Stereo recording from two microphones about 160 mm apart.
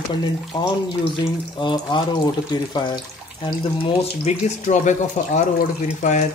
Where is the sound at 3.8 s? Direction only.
40° left (ahead or behind).